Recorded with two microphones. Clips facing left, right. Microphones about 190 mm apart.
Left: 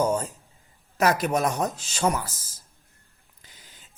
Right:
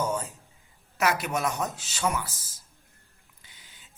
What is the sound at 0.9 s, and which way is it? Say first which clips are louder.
Speech: left 5 dB; 40° left (ahead or behind).